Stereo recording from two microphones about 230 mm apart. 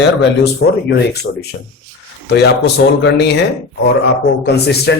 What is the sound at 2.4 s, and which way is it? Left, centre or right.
Speech, left.